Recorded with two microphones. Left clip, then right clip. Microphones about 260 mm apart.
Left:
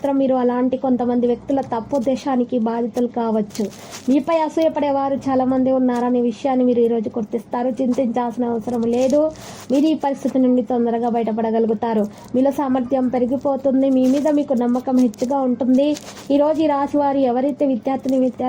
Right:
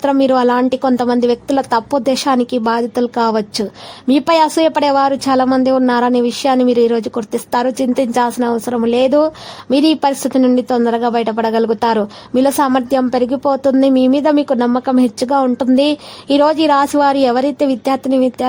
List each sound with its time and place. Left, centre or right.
0.0 s a woman's voice: right